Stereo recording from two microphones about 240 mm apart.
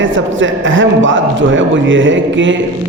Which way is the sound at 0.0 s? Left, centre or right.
Right.